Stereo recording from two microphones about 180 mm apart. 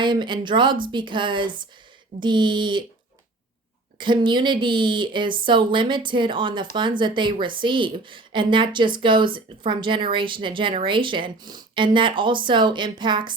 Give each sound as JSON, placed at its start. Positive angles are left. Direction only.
{"t": 0.0, "sound": "a woman's voice", "side_deg": -25}
{"t": 3.9, "sound": "a woman's voice", "side_deg": -25}